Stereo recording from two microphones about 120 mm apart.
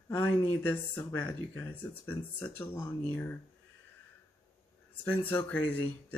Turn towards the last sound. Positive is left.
turn(degrees=15)  # may be behind; listen again after turning